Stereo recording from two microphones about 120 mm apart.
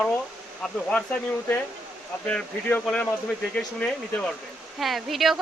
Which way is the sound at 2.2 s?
10° left (ahead or behind).